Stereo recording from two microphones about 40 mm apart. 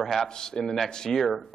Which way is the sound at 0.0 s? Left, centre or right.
Centre.